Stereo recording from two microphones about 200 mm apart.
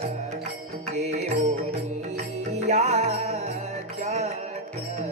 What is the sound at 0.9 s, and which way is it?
Music, 35° right (ahead or behind).